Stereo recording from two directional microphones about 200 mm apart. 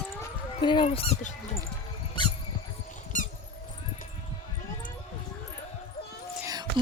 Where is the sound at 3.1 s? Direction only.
40° left (ahead or behind).